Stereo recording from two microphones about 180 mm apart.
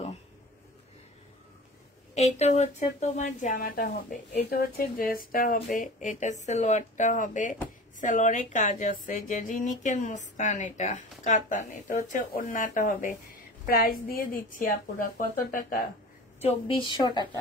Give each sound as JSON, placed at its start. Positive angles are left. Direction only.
{"t": 2.1, "sound": "a woman's voice", "side_deg": 35}
{"t": 16.3, "sound": "a woman's voice", "side_deg": 35}
{"t": 16.8, "sound": "speech", "side_deg": 25}